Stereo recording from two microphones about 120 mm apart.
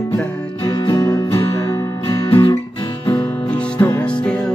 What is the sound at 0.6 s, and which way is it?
Music, 40° left (ahead or behind).